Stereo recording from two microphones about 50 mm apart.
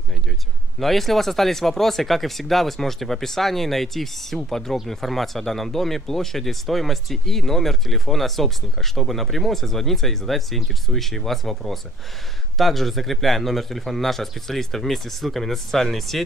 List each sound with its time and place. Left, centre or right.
0.7 s speech: centre